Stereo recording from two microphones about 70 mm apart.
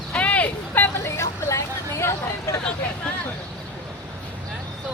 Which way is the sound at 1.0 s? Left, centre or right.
Left.